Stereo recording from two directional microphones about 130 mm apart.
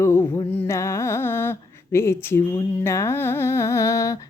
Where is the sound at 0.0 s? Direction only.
20° left (ahead or behind).